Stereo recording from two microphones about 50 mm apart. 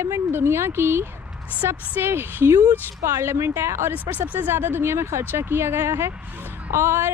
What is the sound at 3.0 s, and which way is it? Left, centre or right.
Speech, right.